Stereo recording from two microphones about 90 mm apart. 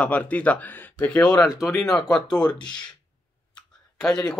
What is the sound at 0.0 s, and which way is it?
Speech, 15° left (ahead or behind).